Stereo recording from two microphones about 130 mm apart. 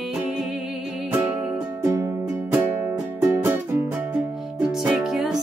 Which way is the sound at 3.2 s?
20° right (ahead or behind).